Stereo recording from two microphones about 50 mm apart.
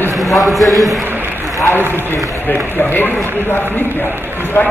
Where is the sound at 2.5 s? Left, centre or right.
Left.